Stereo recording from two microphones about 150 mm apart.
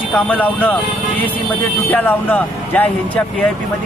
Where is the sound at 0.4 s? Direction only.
10° left (ahead or behind).